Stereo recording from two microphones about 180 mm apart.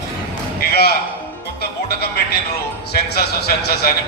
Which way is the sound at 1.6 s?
60° left (ahead or behind).